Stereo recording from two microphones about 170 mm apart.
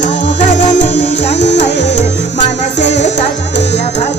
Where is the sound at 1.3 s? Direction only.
90° left.